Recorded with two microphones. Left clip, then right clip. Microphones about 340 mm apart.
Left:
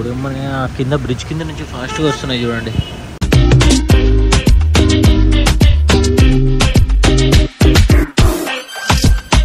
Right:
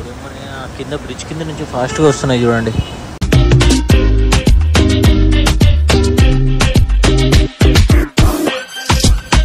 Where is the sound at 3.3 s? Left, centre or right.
Centre.